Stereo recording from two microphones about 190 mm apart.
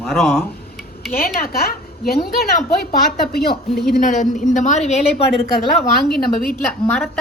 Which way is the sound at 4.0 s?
40° left (ahead or behind).